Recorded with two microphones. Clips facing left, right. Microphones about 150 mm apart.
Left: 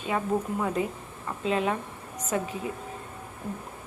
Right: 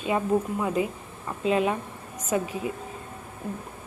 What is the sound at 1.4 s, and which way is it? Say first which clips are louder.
Speech: right 3 dB; 10° right (ahead or behind).